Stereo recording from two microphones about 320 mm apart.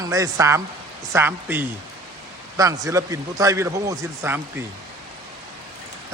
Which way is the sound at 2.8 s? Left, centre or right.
Centre.